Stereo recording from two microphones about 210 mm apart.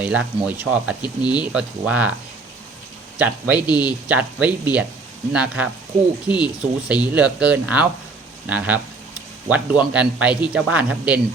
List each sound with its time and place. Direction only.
0.0 s speech: 5° right (ahead or behind)
3.2 s speech: 5° right (ahead or behind)